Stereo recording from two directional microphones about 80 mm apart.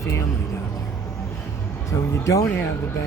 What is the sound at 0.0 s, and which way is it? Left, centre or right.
Music, left.